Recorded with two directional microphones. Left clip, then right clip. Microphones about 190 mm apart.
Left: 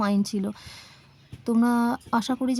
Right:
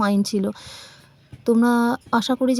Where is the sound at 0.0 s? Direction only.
25° right (ahead or behind).